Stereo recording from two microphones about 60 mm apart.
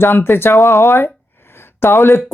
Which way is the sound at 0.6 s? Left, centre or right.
Left.